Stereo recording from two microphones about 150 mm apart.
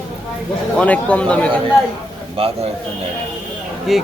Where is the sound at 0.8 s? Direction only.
10° left (ahead or behind).